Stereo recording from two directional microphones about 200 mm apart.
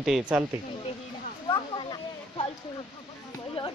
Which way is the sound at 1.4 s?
25° left (ahead or behind).